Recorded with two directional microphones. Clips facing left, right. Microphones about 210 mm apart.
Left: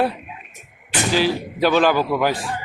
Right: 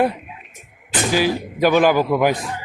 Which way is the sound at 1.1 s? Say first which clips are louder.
Even; 15° right (ahead or behind).